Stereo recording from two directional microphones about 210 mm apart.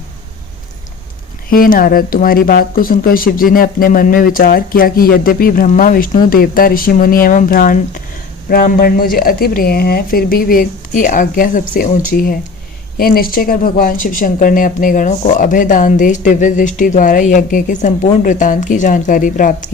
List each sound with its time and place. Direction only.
1.5 s speech: 40° left (ahead or behind)